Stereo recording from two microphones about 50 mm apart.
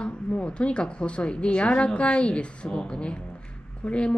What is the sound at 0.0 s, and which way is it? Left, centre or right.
A woman's voice, left.